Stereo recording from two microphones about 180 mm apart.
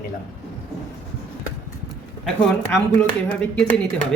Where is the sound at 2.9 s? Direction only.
10° left (ahead or behind).